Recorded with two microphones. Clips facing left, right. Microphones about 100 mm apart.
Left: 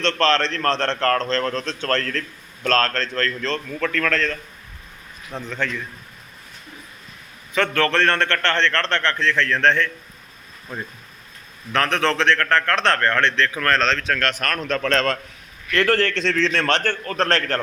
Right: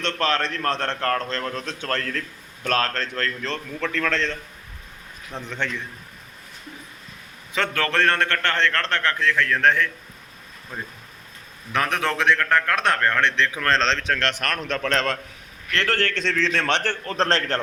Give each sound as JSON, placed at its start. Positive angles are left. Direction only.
{"t": 0.0, "sound": "a man's voice", "side_deg": -10}
{"t": 5.5, "sound": "a man's voice", "side_deg": -25}
{"t": 7.5, "sound": "a man's voice", "side_deg": -15}
{"t": 11.7, "sound": "a man's voice", "side_deg": -15}
{"t": 15.7, "sound": "a man's voice", "side_deg": 5}
{"t": 16.2, "sound": "a man's voice", "side_deg": -10}
{"t": 17.1, "sound": "a man's voice", "side_deg": -30}